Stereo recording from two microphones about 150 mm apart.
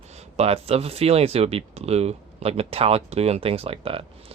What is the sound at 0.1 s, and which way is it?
Speech, 45° right (ahead or behind).